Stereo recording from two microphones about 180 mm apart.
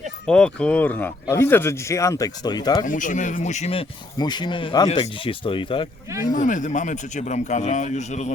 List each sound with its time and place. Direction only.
0.3 s speech: 5° left (ahead or behind); by 2.8 s 20° left (ahead or behind)
2.8 s speech: 45° left (ahead or behind); by 5.9 s 30° left (ahead or behind)
6.3 s speech: 45° left (ahead or behind)